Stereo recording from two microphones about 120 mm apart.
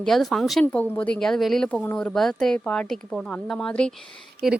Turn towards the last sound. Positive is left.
turn(degrees=0)  # may be behind; listen again after turning